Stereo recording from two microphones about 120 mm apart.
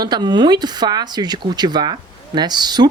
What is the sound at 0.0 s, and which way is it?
Speech, 35° right (ahead or behind).